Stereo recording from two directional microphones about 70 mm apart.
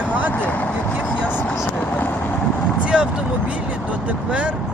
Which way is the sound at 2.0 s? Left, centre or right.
Left.